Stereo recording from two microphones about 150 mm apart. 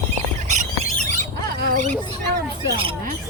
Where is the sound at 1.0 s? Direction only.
50° right (ahead or behind).